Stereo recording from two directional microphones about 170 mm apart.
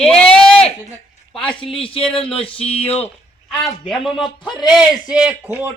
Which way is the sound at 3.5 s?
Centre (ahead or behind).